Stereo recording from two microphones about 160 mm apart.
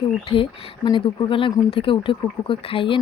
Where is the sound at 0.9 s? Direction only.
30° left (ahead or behind).